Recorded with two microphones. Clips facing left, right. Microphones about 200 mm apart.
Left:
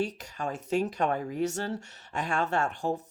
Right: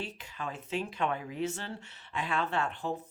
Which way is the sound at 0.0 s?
45° left (ahead or behind).